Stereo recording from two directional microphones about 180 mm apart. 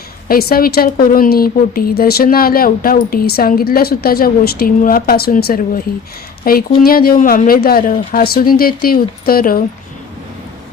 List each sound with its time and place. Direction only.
0.3 s a woman's voice: 55° left (ahead or behind)